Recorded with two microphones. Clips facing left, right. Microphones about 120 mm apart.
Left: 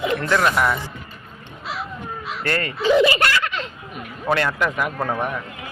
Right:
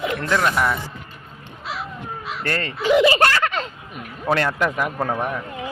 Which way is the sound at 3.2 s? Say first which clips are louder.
Right 3 dB; 45° right (ahead or behind).